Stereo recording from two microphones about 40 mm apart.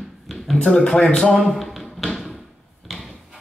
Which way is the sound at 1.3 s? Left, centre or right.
Centre.